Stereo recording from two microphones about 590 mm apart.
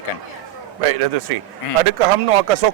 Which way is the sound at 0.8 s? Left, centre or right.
Right.